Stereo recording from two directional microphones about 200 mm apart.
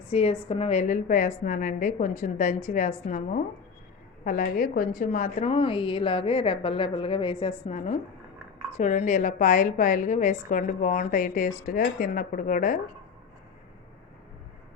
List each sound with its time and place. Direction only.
0.1 s a woman's voice: 30° left (ahead or behind)